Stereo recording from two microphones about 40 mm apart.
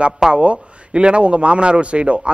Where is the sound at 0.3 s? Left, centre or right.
Right.